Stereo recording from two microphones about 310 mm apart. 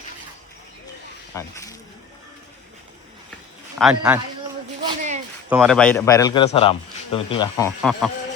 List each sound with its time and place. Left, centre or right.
1.3 s speech: centre
3.8 s a man's voice: centre
4.8 s a sound: centre
5.5 s a man's voice: centre
7.8 s a man's voice: centre